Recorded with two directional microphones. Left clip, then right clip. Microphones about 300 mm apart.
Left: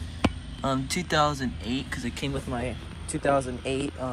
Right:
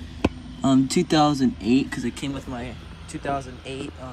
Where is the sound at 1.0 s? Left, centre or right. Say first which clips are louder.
Even; centre.